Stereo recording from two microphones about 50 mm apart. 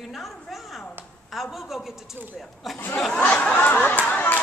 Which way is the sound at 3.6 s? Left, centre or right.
Left.